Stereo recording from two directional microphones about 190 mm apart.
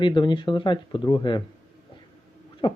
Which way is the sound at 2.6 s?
25° left (ahead or behind).